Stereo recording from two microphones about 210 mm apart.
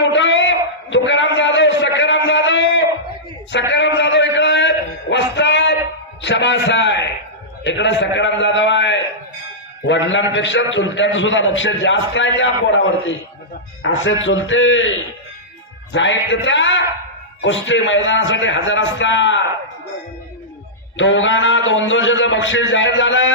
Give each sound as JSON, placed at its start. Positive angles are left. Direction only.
{"t": 0.0, "sound": "a sound", "side_deg": 60}
{"t": 7.6, "sound": "a man's voice", "side_deg": 60}
{"t": 20.9, "sound": "a man's voice", "side_deg": 65}